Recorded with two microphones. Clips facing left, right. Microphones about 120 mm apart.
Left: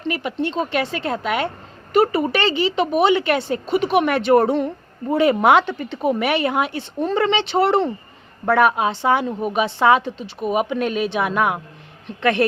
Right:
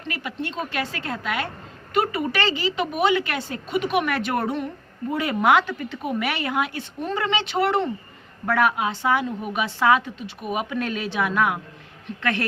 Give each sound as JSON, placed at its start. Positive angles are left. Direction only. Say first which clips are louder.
{"t": 0.0, "sound": "a woman's voice", "louder": "left 7 dB", "side_deg": 25}